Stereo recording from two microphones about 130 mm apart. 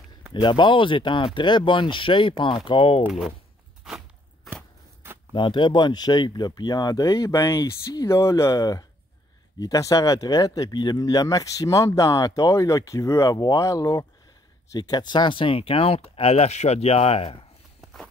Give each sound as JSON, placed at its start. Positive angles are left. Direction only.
{"t": 0.3, "sound": "speech", "side_deg": 35}
{"t": 3.1, "sound": "speech", "side_deg": 0}
{"t": 5.3, "sound": "speech", "side_deg": 40}